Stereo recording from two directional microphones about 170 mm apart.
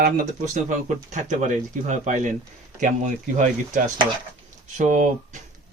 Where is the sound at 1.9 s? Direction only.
45° right (ahead or behind).